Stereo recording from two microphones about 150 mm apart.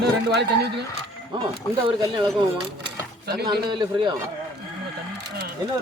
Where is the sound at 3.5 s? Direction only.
30° right (ahead or behind).